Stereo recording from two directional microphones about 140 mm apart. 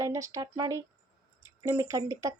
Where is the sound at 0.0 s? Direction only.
20° right (ahead or behind).